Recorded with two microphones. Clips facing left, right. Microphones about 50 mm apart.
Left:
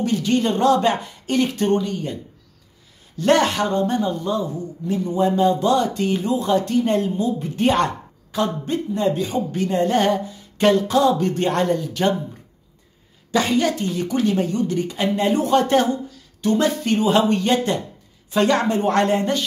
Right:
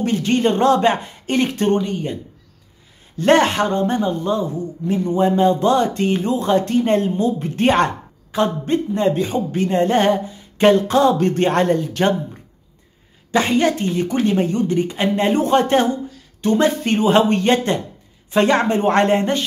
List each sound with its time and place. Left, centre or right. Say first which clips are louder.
0.0 s speech: right 2 dB; right
3.2 s speech: right 3 dB; right
13.3 s speech: right 2 dB; right